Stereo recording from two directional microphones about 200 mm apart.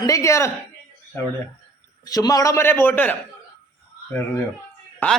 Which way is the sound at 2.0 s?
20° left (ahead or behind).